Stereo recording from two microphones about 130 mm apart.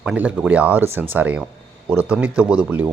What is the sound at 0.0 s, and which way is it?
Speech, 10° right (ahead or behind).